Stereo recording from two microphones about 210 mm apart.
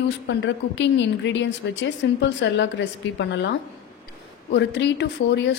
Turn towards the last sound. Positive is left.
turn(degrees=55)  # may be behind; listen again after turning